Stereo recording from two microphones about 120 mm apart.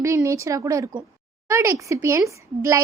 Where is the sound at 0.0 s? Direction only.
25° right (ahead or behind).